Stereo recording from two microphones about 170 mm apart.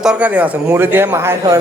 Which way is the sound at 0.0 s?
5° right (ahead or behind).